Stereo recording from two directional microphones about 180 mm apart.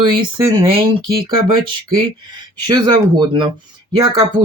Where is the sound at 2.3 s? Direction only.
25° right (ahead or behind).